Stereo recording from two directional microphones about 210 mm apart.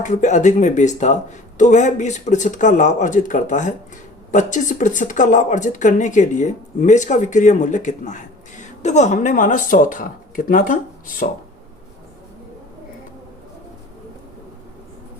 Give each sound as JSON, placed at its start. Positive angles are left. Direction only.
{"t": 0.0, "sound": "speech", "side_deg": 35}